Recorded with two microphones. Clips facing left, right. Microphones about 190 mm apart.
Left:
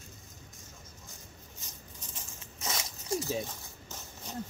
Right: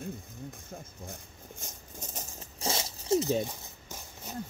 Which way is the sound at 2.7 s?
30° right (ahead or behind).